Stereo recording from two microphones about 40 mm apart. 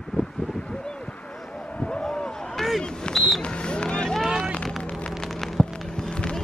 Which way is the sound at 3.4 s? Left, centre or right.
Left.